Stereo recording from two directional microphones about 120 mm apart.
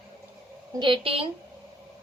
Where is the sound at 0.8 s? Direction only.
45° right (ahead or behind).